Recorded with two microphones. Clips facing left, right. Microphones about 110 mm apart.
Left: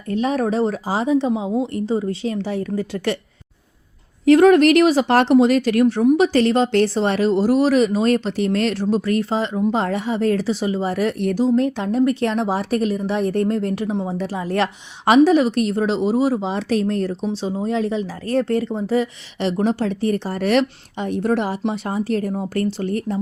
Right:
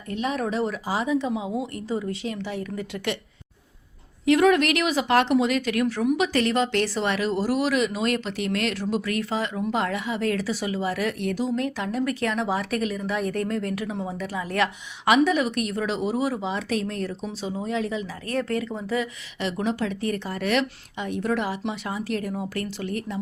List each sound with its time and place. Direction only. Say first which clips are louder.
0.1 s speech: left 7 dB; 35° left (ahead or behind)
4.3 s speech: left 7 dB; 40° left (ahead or behind)